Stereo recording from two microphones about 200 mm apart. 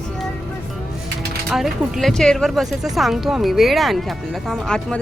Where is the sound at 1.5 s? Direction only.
Centre (ahead or behind).